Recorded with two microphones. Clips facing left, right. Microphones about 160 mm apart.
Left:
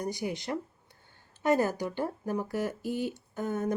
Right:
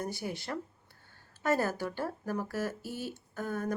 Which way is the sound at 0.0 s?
15° left (ahead or behind).